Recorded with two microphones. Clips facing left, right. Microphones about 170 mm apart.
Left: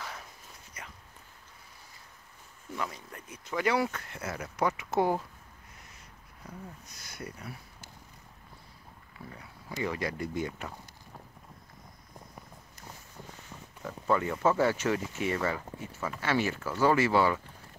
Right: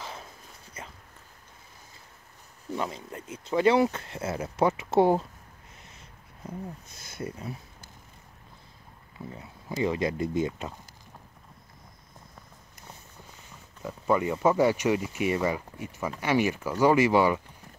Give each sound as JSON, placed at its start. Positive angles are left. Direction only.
{"t": 0.0, "sound": "a sound", "side_deg": -25}
{"t": 2.7, "sound": "speech", "side_deg": -25}
{"t": 6.4, "sound": "speech", "side_deg": -25}
{"t": 9.3, "sound": "speech", "side_deg": -25}
{"t": 13.8, "sound": "speech", "side_deg": -15}